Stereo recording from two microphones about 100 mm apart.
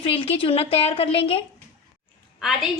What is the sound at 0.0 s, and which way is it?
A woman's voice, 80° left.